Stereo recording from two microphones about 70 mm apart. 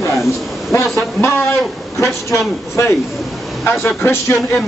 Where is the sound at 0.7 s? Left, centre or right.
Left.